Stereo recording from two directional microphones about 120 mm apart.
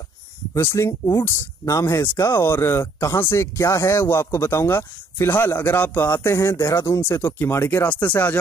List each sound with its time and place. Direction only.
0.6 s speech: 20° left (ahead or behind)